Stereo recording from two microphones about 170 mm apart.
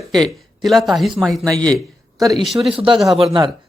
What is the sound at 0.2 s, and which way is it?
A man's voice, centre (ahead or behind).